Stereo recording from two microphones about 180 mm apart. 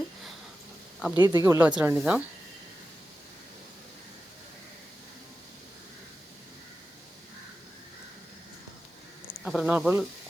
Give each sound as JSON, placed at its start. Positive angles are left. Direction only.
{"t": 1.2, "sound": "speech", "side_deg": -20}
{"t": 9.4, "sound": "speech", "side_deg": -5}